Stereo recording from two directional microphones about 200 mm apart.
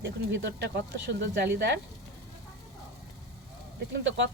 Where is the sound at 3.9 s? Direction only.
65° right (ahead or behind).